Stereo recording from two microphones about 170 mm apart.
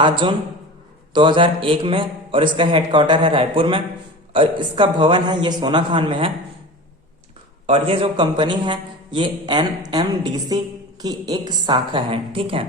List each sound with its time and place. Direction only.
1.1 s a man's voice: 30° right (ahead or behind)
7.7 s a man's voice: 35° right (ahead or behind)